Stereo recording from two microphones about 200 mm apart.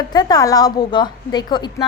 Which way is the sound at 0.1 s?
20° left (ahead or behind).